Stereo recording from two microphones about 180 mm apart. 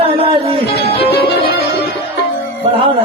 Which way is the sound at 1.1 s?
65° left (ahead or behind).